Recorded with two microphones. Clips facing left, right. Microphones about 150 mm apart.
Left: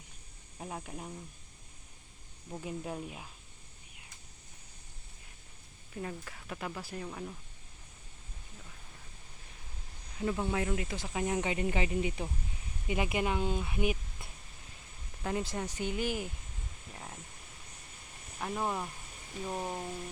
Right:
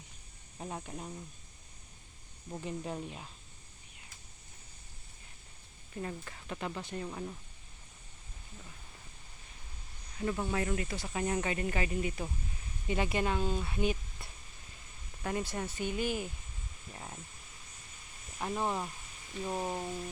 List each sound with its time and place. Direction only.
0.6 s speech: 5° left (ahead or behind)
2.5 s speech: 5° left (ahead or behind)
5.9 s speech: centre (ahead or behind)
10.2 s speech: 10° left (ahead or behind)
18.3 s speech: 5° right (ahead or behind)